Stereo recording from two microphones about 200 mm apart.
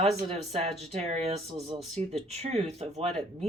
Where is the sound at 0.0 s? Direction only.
30° right (ahead or behind).